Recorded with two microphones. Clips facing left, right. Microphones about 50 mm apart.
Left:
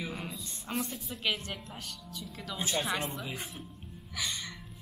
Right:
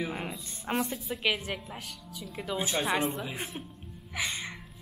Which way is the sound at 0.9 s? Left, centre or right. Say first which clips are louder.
Right 4 dB; centre.